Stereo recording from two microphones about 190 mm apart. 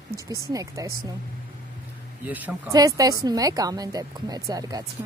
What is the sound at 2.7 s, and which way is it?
Speech, 20° right (ahead or behind).